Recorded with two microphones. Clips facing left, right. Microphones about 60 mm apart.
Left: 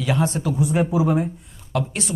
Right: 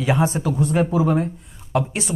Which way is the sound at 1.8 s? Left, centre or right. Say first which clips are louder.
Right 1 dB; centre.